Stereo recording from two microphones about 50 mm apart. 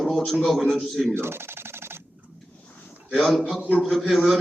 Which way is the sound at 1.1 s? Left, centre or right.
Right.